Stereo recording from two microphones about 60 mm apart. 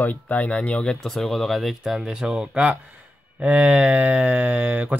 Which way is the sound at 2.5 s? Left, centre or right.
Right.